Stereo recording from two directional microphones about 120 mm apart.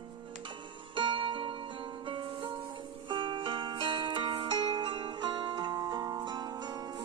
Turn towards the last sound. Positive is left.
turn(degrees=-35)  # may be behind; listen again after turning